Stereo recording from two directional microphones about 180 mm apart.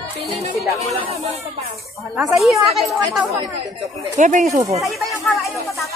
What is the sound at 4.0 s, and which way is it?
Speech, 45° right (ahead or behind).